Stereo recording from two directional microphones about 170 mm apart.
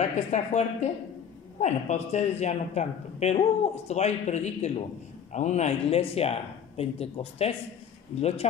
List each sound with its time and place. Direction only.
0.0 s a woman's voice: 40° left (ahead or behind)